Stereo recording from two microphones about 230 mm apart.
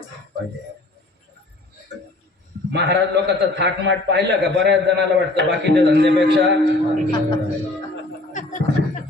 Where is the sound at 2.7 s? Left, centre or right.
Right.